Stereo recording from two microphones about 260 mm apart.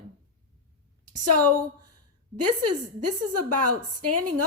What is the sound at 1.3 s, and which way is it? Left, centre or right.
Speech, right.